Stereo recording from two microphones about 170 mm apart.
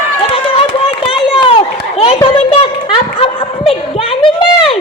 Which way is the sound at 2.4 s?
35° left (ahead or behind).